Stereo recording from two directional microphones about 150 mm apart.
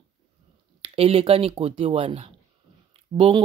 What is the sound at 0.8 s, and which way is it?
Speech, 40° right (ahead or behind).